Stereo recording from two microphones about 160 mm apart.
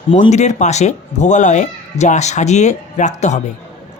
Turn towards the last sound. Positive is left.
turn(degrees=45)  # may be behind; listen again after turning